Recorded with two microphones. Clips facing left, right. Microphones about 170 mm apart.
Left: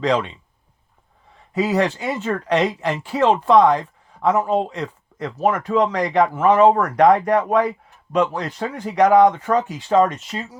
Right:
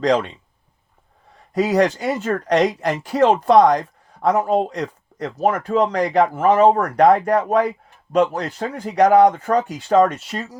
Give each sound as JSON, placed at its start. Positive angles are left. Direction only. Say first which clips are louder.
{"t": 0.0, "sound": "a man's voice", "louder": "right 2 dB", "side_deg": -40}
{"t": 1.5, "sound": "a man's voice", "louder": "right 2 dB", "side_deg": -40}